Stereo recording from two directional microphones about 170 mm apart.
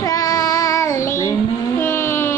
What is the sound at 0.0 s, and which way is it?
Child singing, 20° left (ahead or behind).